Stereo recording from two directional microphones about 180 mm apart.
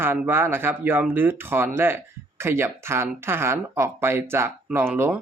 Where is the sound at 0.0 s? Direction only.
10° right (ahead or behind).